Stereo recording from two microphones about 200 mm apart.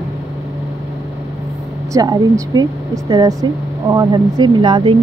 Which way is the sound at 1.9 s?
15° right (ahead or behind).